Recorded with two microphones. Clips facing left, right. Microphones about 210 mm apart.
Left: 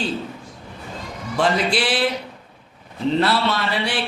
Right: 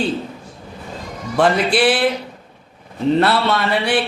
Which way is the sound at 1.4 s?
55° right (ahead or behind).